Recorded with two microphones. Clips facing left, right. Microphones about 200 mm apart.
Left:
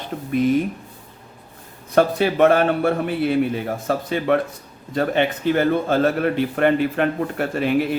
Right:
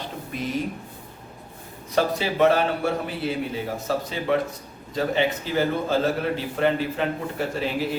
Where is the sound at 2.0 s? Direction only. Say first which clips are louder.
Left 5 dB; 55° left (ahead or behind).